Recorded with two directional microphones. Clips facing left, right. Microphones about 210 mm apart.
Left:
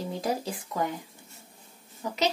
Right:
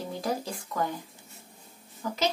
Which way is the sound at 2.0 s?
20° left (ahead or behind).